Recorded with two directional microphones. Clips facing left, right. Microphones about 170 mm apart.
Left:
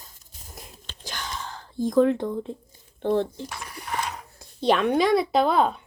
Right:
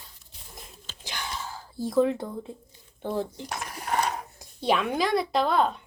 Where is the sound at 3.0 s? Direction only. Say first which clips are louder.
Left 6 dB; 5° right (ahead or behind).